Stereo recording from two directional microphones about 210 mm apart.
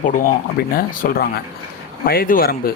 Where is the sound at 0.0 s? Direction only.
40° left (ahead or behind).